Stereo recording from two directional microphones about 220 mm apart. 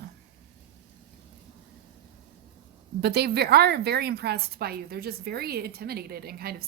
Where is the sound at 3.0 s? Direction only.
45° right (ahead or behind).